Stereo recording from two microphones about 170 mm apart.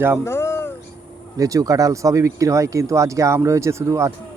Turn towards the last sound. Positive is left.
turn(degrees=-15)  # may be behind; listen again after turning